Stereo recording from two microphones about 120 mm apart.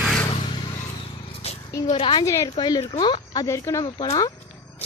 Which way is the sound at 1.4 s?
65° left (ahead or behind).